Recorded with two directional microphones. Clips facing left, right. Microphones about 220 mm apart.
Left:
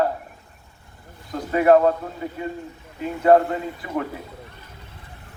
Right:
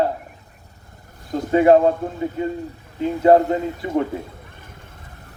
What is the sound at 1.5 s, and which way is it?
Speech, 25° right (ahead or behind).